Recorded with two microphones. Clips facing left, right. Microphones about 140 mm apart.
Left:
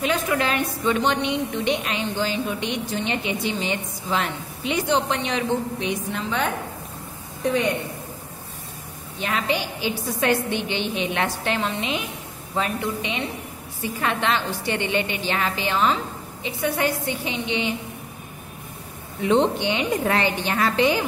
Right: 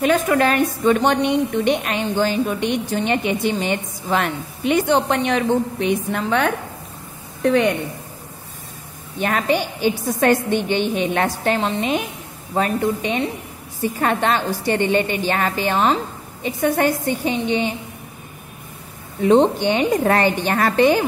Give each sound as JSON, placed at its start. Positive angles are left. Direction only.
{"t": 0.0, "sound": "a woman's voice", "side_deg": -50}
{"t": 9.2, "sound": "a woman's voice", "side_deg": -50}
{"t": 19.2, "sound": "a woman's voice", "side_deg": -40}